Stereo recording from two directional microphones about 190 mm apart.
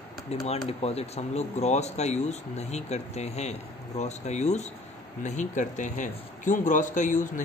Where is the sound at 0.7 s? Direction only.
35° left (ahead or behind).